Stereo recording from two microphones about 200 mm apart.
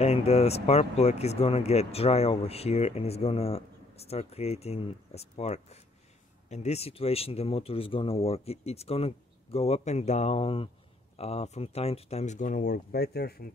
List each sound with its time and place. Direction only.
0.0 s speech: 30° left (ahead or behind); by 13.5 s 50° left (ahead or behind)